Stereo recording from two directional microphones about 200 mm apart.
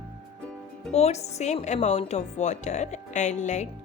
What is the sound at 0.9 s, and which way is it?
A woman's voice, 35° left (ahead or behind).